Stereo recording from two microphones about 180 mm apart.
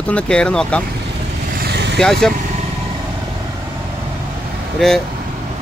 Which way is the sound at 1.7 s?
70° right (ahead or behind).